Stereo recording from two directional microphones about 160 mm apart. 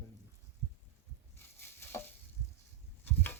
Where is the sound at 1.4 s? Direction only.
15° left (ahead or behind).